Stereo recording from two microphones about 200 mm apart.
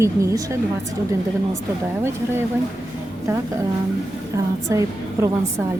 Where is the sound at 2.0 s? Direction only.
10° right (ahead or behind).